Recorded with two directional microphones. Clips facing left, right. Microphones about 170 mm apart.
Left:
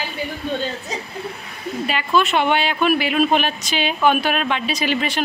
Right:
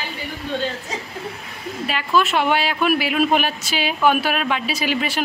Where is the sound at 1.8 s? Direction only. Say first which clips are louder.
Left 1 dB; centre (ahead or behind).